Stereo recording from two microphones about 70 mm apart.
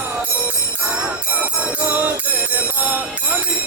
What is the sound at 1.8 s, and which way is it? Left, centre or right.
Music, right.